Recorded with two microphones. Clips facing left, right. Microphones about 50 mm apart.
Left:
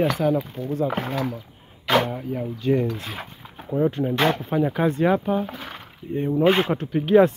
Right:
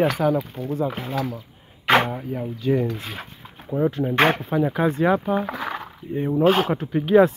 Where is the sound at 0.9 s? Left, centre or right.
Left.